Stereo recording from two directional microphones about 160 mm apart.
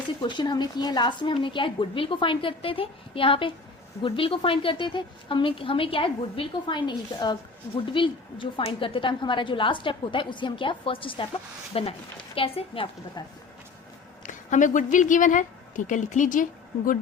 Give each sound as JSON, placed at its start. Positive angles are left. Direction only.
{"t": 0.2, "sound": "a woman's voice", "side_deg": 30}
{"t": 14.3, "sound": "a woman's voice", "side_deg": 55}